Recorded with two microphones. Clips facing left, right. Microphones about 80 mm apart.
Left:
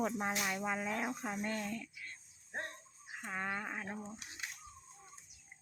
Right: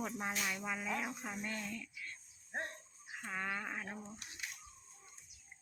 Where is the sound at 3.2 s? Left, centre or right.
Left.